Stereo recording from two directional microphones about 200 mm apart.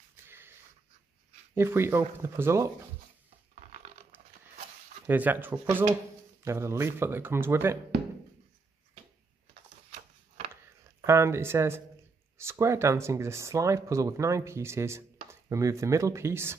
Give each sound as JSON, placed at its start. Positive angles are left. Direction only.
{"t": 0.3, "sound": "wheeze", "side_deg": -10}
{"t": 1.5, "sound": "speech", "side_deg": -10}
{"t": 3.5, "sound": "a sound", "side_deg": -40}
{"t": 5.0, "sound": "speech", "side_deg": -10}
{"t": 9.8, "sound": "a sound", "side_deg": -35}
{"t": 11.1, "sound": "speech", "side_deg": -15}